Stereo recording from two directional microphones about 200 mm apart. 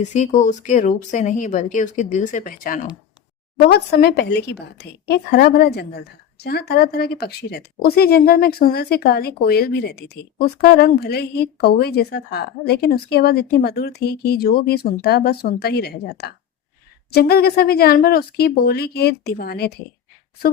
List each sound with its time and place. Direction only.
0.0 s speech: 35° left (ahead or behind)
3.7 s a woman's voice: 55° left (ahead or behind)